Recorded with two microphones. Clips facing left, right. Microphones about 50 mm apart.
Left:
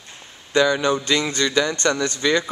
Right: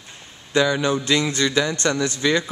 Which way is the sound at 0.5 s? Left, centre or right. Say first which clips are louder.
Left 1 dB; centre.